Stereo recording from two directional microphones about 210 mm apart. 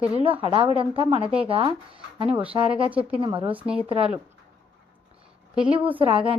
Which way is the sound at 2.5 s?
25° right (ahead or behind).